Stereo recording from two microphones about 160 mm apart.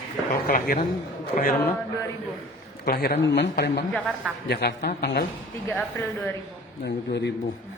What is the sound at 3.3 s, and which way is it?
Speech, 90° left.